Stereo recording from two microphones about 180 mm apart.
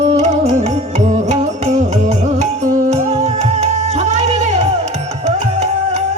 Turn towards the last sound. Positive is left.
turn(degrees=-40)  # may be behind; listen again after turning